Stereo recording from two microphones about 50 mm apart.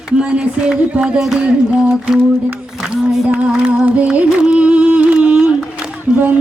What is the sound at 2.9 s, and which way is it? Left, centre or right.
Music, centre.